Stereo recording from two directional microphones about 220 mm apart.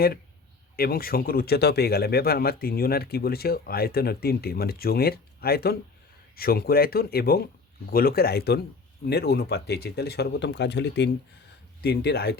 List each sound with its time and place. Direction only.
0.8 s speech: 45° left (ahead or behind)